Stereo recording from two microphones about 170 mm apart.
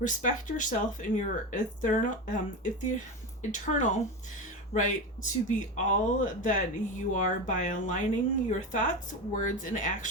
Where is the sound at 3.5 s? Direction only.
45° left (ahead or behind).